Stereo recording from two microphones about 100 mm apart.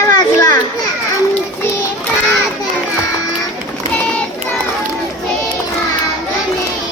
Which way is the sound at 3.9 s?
10° left (ahead or behind).